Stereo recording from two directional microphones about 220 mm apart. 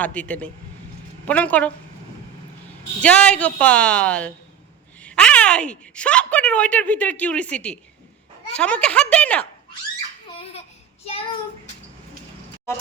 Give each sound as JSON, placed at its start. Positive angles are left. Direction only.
{"t": 0.0, "sound": "a man's voice", "side_deg": 5}
{"t": 3.0, "sound": "speech", "side_deg": 5}
{"t": 11.0, "sound": "child singing", "side_deg": 25}